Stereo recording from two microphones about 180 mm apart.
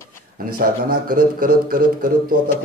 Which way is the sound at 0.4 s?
50° right (ahead or behind).